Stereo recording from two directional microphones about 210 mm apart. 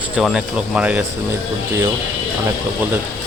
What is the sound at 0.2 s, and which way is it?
Speech, 5° right (ahead or behind).